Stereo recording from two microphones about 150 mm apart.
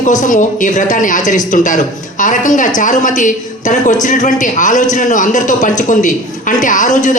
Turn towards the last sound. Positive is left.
turn(degrees=55)  # may be behind; listen again after turning